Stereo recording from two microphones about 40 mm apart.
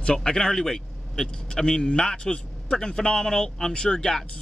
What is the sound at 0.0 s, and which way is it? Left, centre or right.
A man's voice, centre.